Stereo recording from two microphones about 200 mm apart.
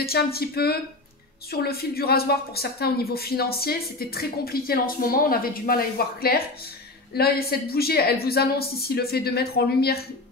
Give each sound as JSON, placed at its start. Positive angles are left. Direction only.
{"t": 0.0, "sound": "a woman's voice", "side_deg": 50}